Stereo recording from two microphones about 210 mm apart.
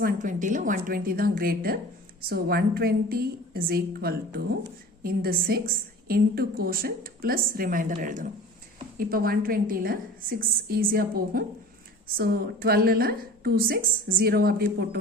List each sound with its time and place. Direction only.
0.0 s a woman's voice: 40° right (ahead or behind)